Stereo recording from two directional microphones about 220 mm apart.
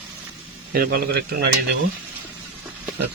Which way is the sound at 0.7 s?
40° right (ahead or behind).